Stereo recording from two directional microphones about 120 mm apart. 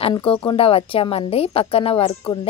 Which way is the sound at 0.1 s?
45° left (ahead or behind).